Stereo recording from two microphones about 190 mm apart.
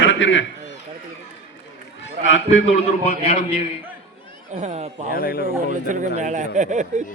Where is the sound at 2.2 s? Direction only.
75° left (ahead or behind).